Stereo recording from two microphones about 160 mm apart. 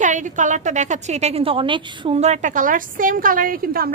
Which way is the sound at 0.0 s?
50° right (ahead or behind).